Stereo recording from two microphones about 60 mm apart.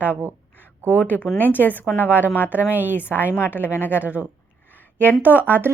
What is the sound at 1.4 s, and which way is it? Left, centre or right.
A woman's voice, left.